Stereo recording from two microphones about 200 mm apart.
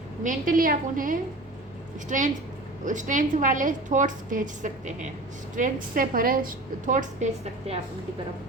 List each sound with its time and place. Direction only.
0.2 s a woman's voice: 40° right (ahead or behind)